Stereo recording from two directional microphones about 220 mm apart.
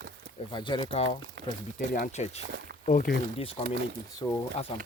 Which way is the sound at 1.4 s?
55° right (ahead or behind).